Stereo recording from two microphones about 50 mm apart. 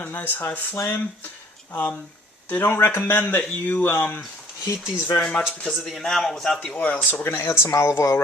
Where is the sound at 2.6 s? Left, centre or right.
Left.